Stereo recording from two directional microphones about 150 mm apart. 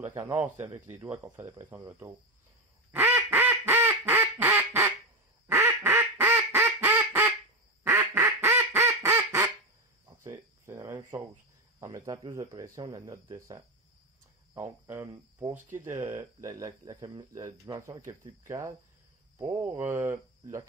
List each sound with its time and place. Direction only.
0.0 s speech: 15° right (ahead or behind)
2.9 s quack: 15° right (ahead or behind)
10.0 s cricket: 20° right (ahead or behind)
11.8 s speech: 25° right (ahead or behind)